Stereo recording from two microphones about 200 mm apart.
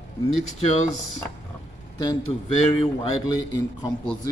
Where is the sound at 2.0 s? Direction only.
20° left (ahead or behind).